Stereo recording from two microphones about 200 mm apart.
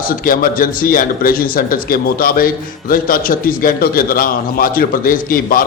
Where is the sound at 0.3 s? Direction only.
45° left (ahead or behind).